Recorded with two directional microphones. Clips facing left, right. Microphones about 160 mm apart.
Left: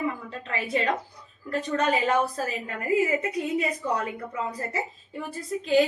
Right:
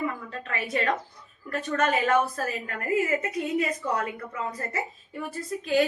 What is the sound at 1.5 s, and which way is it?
A woman's voice, 25° left (ahead or behind).